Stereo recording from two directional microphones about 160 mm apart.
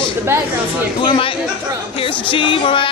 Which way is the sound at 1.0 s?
30° left (ahead or behind).